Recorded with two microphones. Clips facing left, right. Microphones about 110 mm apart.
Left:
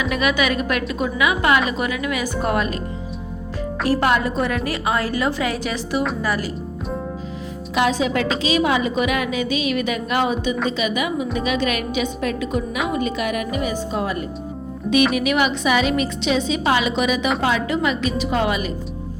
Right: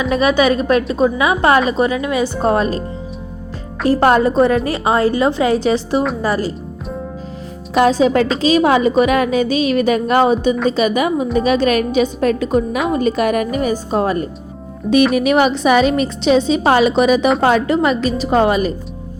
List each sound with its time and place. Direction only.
0.0 s a woman's voice: 30° right (ahead or behind)
3.8 s a woman's voice: 35° right (ahead or behind)
7.7 s a woman's voice: 40° right (ahead or behind)